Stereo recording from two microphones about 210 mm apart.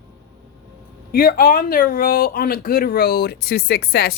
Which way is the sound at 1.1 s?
45° left (ahead or behind).